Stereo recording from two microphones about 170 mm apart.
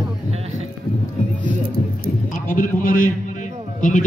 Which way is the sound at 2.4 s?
55° left (ahead or behind).